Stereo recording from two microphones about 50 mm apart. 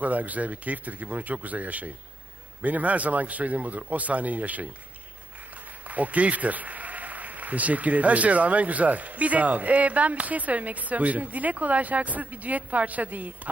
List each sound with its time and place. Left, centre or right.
0.0 s a man's voice: right
5.9 s a man's voice: right